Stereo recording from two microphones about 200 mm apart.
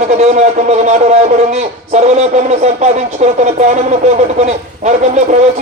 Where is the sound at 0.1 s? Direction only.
35° right (ahead or behind).